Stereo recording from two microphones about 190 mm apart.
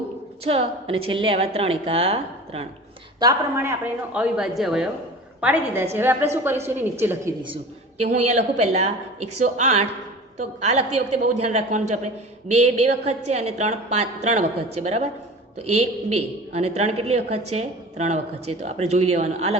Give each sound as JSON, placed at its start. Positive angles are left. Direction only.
{"t": 0.4, "sound": "a woman's voice", "side_deg": -30}
{"t": 3.2, "sound": "speech", "side_deg": -15}
{"t": 7.4, "sound": "a woman's voice", "side_deg": -30}